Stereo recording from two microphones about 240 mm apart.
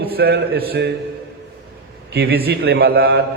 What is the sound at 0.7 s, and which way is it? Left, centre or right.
Mantra, right.